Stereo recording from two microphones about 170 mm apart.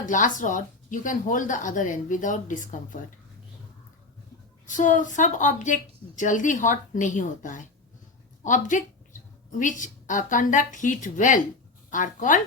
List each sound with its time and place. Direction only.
0.0 s a woman's voice: 50° left (ahead or behind)
4.6 s a woman's voice: 50° left (ahead or behind)